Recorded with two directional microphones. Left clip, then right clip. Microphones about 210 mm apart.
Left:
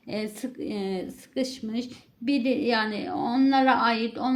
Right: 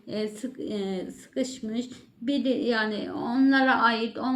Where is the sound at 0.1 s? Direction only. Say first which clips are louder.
Right 1 dB; 30° left (ahead or behind).